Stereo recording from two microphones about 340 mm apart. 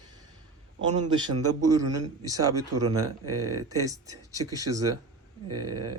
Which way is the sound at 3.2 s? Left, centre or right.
Right.